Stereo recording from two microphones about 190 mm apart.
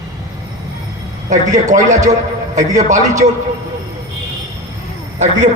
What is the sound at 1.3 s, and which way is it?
A man's voice, 40° right (ahead or behind).